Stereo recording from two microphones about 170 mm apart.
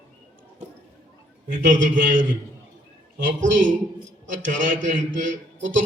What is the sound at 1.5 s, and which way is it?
Speech, 50° right (ahead or behind).